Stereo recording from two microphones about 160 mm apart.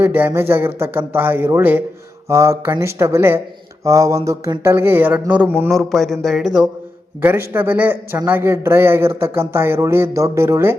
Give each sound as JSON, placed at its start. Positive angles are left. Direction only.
{"t": 0.0, "sound": "speech", "side_deg": -15}
{"t": 5.7, "sound": "speech", "side_deg": 0}